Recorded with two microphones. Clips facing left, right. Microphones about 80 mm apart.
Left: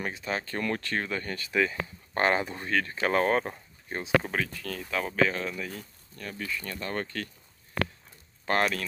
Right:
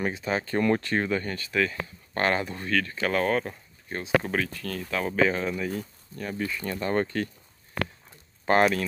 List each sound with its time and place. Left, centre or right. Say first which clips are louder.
0.0 s speech: right 4 dB; centre
1.1 s speech: right 5 dB; centre
1.5 s speech: even; centre; by 3.5 s left
4.2 s speech: right 3 dB; centre
5.1 s speech: right 3 dB; centre
8.5 s speech: right 5 dB; centre